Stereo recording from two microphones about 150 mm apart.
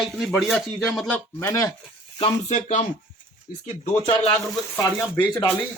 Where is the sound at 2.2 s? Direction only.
50° left (ahead or behind).